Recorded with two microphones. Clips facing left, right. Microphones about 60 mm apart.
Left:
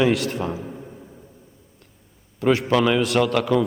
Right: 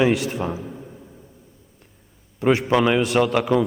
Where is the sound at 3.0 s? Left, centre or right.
Centre.